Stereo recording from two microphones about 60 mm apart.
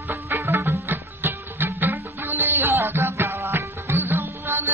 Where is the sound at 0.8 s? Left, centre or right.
Right.